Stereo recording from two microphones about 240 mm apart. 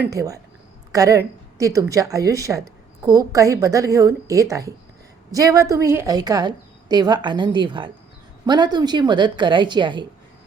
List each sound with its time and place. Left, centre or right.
0.1 s a woman's voice: centre